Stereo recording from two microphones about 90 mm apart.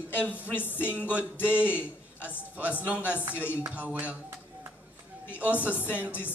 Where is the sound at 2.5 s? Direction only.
15° right (ahead or behind).